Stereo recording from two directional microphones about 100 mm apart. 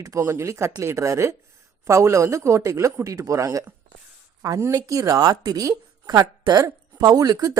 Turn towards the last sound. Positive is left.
turn(degrees=-35)  # may be behind; listen again after turning